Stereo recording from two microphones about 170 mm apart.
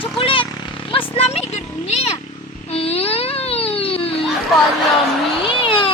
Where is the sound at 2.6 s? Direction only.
35° left (ahead or behind).